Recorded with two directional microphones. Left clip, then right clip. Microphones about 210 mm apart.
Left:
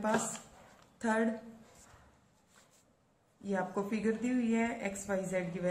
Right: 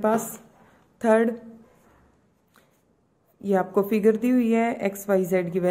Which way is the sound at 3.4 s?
45° right (ahead or behind).